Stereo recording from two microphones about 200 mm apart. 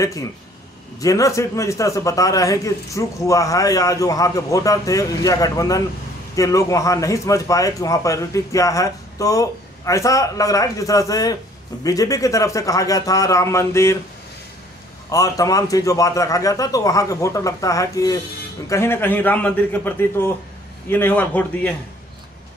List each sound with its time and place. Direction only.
1.0 s a man's voice: 15° left (ahead or behind)
15.0 s a man's voice: 15° left (ahead or behind)